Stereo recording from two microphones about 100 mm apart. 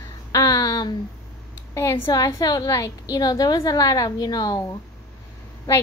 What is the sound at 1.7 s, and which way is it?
Speech, 25° left (ahead or behind).